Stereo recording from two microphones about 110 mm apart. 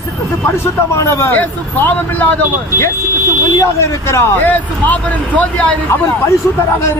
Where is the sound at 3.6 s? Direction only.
25° left (ahead or behind).